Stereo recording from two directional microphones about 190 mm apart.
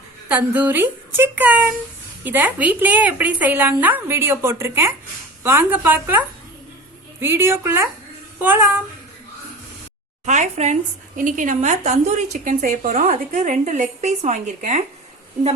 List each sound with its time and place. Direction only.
0.3 s a woman's voice: 5° right (ahead or behind)
10.2 s speech: 40° right (ahead or behind)